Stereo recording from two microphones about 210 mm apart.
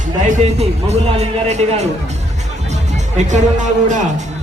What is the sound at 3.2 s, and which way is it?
Speech, 35° right (ahead or behind).